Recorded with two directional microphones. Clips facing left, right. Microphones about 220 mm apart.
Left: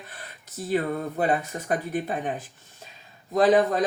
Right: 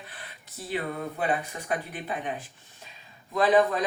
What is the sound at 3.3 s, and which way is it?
Speech, 40° left (ahead or behind).